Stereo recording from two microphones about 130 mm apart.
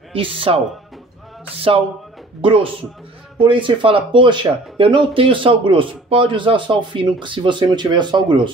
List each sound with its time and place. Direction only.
0.1 s speech: 45° right (ahead or behind)
2.4 s speech: 45° right (ahead or behind)